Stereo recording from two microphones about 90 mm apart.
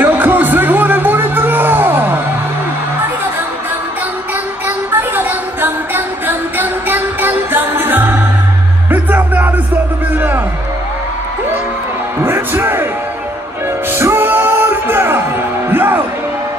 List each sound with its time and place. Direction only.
0.0 s music: 20° right (ahead or behind)
4.6 s music: 20° right (ahead or behind)
12.2 s music: 25° right (ahead or behind)
13.9 s music: 25° right (ahead or behind)